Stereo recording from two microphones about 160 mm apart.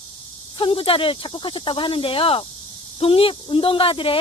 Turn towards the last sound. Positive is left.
turn(degrees=35)  # may be behind; listen again after turning